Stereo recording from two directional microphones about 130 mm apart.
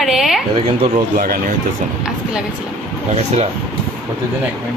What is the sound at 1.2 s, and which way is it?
Speech, 90° right.